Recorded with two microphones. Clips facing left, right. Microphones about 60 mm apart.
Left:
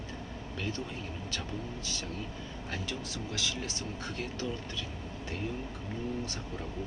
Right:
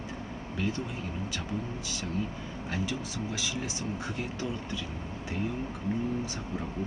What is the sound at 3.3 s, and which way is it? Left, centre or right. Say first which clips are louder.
Speech: right 2 dB; centre.